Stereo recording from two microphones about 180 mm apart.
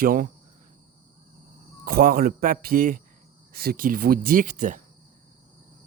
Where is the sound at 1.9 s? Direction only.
55° right (ahead or behind).